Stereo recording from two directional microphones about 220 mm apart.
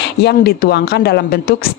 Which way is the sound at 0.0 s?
50° left (ahead or behind).